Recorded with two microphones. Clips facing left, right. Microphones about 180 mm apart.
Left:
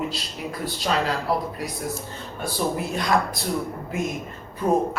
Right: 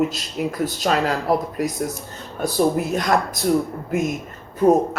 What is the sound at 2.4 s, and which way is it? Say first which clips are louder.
Speech: right 7 dB; 45° right (ahead or behind).